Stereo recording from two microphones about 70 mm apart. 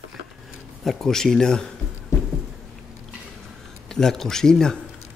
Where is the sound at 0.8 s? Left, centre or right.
Centre.